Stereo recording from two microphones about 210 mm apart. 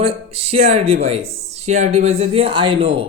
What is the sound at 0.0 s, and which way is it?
A man's voice, 30° right (ahead or behind).